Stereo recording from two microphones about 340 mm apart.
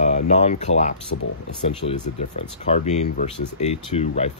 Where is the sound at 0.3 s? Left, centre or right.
Centre.